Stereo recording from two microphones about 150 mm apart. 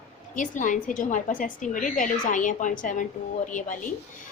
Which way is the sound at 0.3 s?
60° left (ahead or behind).